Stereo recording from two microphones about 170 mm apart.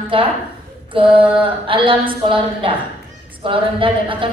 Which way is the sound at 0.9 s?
30° right (ahead or behind).